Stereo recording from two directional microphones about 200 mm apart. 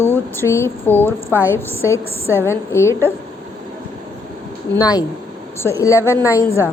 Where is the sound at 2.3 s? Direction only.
10° left (ahead or behind).